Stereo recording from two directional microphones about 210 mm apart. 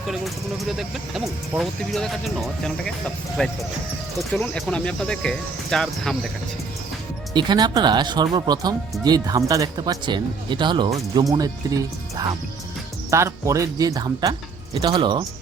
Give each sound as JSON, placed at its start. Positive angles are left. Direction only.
{"t": 0.8, "sound": "speech", "side_deg": 0}
{"t": 7.3, "sound": "speech", "side_deg": -20}